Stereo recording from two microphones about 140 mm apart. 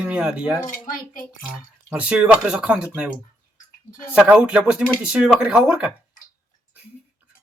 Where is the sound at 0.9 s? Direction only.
90° left.